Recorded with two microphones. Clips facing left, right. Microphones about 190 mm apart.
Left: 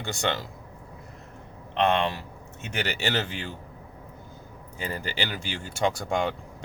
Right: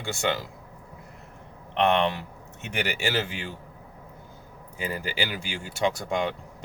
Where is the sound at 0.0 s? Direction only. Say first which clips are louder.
Right 1 dB; 5° right (ahead or behind).